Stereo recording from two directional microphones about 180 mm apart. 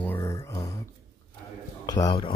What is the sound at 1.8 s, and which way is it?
Speech, 20° left (ahead or behind).